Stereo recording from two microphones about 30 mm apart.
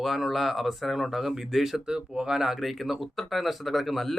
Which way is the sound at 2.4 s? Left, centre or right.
Centre.